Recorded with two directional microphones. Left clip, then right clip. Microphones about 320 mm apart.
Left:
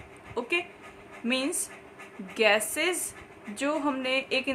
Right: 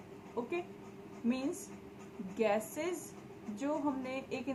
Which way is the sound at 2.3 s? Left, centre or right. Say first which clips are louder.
Left 10 dB; left.